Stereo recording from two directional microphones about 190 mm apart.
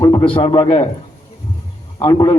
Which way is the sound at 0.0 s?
20° left (ahead or behind).